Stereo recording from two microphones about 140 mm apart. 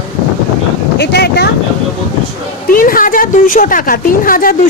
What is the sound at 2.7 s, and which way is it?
Speech, 90° left.